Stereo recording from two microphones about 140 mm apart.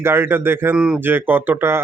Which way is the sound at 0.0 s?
15° right (ahead or behind).